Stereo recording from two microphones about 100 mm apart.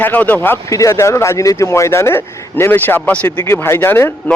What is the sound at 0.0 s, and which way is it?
Speech, 20° left (ahead or behind).